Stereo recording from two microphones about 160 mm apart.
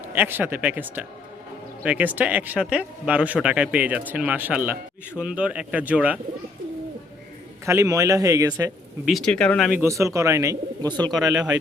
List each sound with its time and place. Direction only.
0.1 s speech: 10° right (ahead or behind)
7.6 s speech: 20° right (ahead or behind)
9.0 s speech: 5° left (ahead or behind)
9.7 s speech: 20° right (ahead or behind)
11.1 s speech: centre (ahead or behind)